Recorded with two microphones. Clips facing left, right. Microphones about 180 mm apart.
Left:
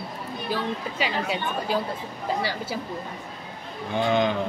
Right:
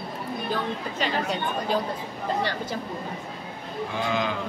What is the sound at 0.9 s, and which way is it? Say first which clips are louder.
Speech: right 2 dB; 5° left (ahead or behind).